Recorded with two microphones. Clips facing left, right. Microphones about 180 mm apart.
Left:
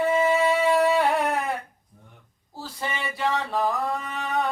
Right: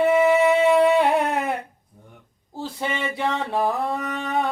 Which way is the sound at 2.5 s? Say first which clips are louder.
Right 5 dB; 20° right (ahead or behind).